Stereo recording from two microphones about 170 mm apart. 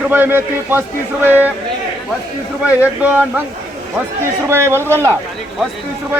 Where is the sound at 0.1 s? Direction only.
10° right (ahead or behind).